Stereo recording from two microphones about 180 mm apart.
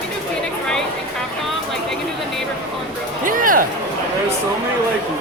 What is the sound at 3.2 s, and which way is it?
Music, 50° right (ahead or behind).